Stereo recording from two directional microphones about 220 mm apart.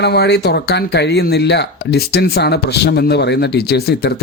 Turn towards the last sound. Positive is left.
turn(degrees=45)  # may be behind; listen again after turning